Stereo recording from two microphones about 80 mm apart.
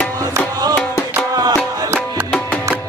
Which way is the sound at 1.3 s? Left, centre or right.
Right.